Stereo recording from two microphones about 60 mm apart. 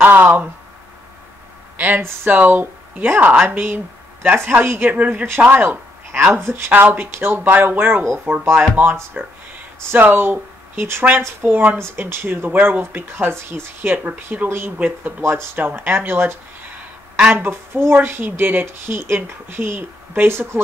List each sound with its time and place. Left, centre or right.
0.0 s a sound: right
1.8 s speech: right
7.4 s speech: right
9.8 s speech: right
11.8 s speech: right
13.9 s speech: right